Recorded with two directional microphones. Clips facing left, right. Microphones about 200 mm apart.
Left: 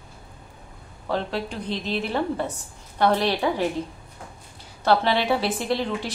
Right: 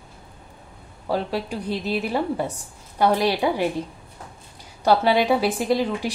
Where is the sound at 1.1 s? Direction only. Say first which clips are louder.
Right 2 dB; 10° right (ahead or behind).